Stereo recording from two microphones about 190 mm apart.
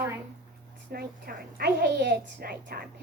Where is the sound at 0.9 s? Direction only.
55° right (ahead or behind).